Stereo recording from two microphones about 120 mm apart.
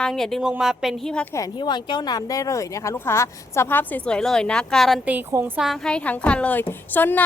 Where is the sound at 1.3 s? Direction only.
35° left (ahead or behind); by 7.2 s 15° left (ahead or behind).